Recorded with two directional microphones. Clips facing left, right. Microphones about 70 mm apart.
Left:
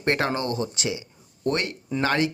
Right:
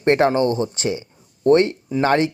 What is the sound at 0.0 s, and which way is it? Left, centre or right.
Speech, right.